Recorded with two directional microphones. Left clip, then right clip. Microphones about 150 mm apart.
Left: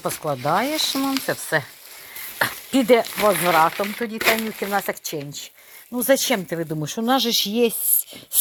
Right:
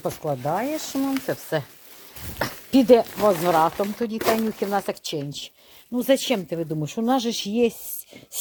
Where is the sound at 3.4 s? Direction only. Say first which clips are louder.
Left 2 dB; 20° right (ahead or behind).